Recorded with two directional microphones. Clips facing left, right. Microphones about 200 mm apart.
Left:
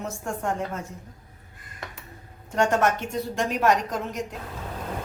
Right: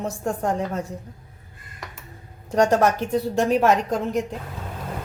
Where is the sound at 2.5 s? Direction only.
35° right (ahead or behind).